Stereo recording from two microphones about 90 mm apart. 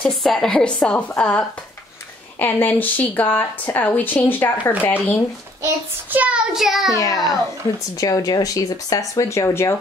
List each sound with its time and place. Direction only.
0.0 s a woman's voice: centre (ahead or behind); by 5.2 s 20° left (ahead or behind)
6.1 s child singing: 15° right (ahead or behind)
6.5 s a child's voice: 5° right (ahead or behind)
6.9 s a child's voice: 40° left (ahead or behind)